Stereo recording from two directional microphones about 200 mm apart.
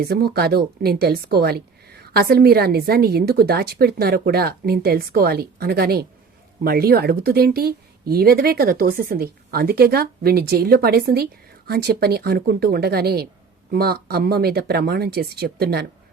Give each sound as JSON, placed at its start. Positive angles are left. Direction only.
{"t": 0.0, "sound": "speech", "side_deg": -50}